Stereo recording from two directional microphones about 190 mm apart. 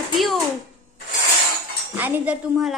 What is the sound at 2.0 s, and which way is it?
Speech, 10° right (ahead or behind).